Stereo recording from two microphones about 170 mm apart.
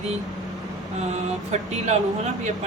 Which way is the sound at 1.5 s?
40° right (ahead or behind).